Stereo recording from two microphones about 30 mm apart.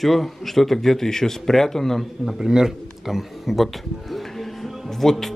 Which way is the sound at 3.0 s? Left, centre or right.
Centre.